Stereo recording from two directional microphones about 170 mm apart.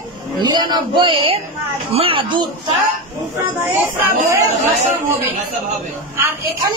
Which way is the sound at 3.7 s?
10° right (ahead or behind).